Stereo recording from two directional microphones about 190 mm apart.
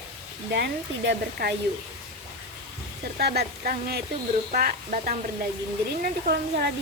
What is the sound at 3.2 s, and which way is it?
Speech, 55° right (ahead or behind).